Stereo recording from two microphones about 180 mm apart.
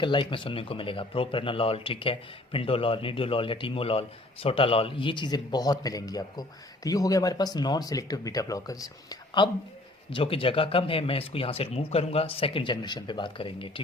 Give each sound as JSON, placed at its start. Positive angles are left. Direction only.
{"t": 0.0, "sound": "speech", "side_deg": 25}